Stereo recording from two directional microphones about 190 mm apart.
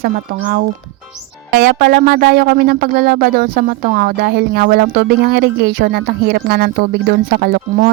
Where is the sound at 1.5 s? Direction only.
55° right (ahead or behind).